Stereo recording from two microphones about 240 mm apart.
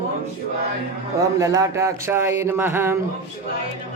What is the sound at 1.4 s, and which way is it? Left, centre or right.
Speech, centre.